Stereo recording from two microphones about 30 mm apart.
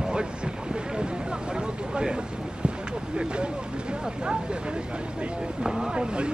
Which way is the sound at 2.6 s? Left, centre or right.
Right.